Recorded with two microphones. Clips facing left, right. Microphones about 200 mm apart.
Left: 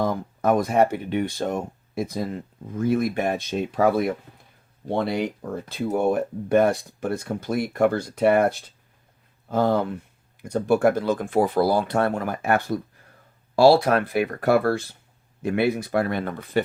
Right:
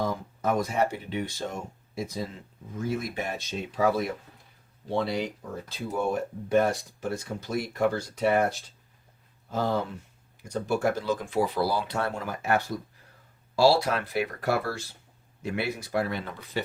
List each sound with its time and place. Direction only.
0.0 s speech: 55° left (ahead or behind)